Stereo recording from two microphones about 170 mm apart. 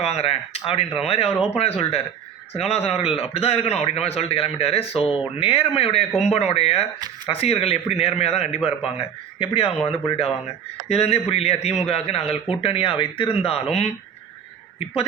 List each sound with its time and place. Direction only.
0.0 s a man's voice: 35° left (ahead or behind)